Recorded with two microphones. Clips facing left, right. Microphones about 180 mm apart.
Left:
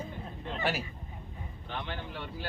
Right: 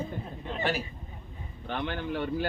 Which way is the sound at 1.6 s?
60° right (ahead or behind).